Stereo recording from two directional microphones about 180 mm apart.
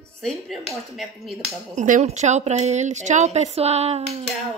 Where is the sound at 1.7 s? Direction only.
45° right (ahead or behind).